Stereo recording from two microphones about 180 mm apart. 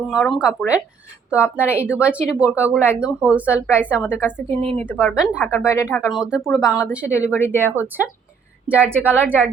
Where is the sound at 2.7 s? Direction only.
10° left (ahead or behind).